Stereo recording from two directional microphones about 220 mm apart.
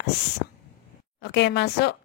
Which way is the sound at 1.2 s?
50° left (ahead or behind).